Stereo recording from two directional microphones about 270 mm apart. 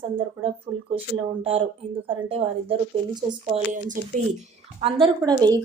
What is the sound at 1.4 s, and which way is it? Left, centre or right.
A woman's voice, centre.